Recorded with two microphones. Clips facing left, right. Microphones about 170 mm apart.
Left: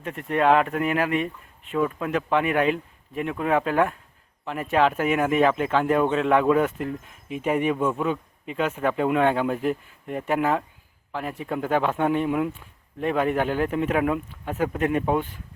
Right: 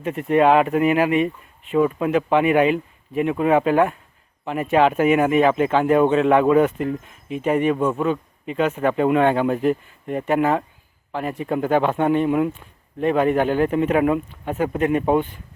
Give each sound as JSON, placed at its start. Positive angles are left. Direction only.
{"t": 0.0, "sound": "speech", "side_deg": -5}